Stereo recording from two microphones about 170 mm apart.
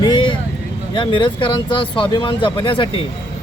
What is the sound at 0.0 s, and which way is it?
Vehicle, 25° left (ahead or behind).